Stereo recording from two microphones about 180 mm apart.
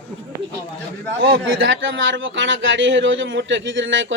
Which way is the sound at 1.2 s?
90° right.